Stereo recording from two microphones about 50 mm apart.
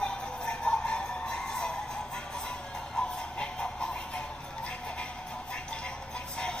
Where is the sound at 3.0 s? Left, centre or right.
Left.